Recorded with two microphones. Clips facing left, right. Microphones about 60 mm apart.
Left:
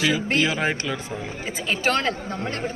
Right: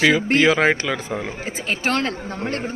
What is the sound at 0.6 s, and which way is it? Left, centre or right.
Speech, right.